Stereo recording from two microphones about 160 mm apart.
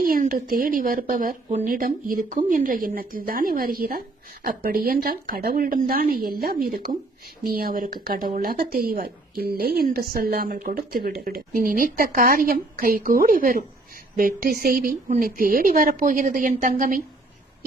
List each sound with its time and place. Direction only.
0.0 s a woman's voice: 60° right (ahead or behind)